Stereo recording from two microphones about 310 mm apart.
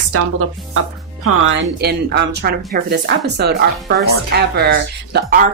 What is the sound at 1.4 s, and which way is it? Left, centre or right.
A woman's voice, right.